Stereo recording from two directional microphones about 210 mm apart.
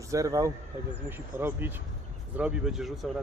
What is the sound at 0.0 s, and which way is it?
Speech, 15° right (ahead or behind).